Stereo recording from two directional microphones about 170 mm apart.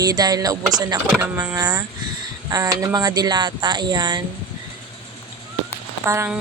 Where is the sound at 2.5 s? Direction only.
20° right (ahead or behind).